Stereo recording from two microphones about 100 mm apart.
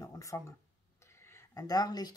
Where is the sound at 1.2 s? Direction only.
30° left (ahead or behind).